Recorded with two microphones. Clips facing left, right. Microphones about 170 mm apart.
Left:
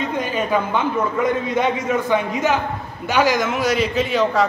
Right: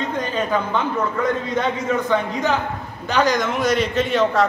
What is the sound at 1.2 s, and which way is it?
A man's voice, 10° left (ahead or behind).